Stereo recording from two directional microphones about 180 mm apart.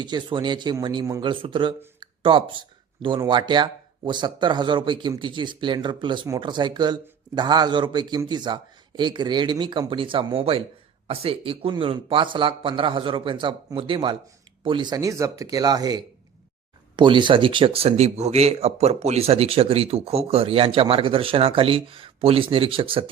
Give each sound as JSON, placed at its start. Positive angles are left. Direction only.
{"t": 0.0, "sound": "speech", "side_deg": -25}
{"t": 2.0, "sound": "a sound", "side_deg": -30}
{"t": 3.2, "sound": "speech", "side_deg": -25}